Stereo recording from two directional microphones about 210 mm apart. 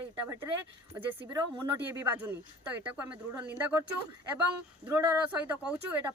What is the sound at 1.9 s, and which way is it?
Speech, 10° right (ahead or behind).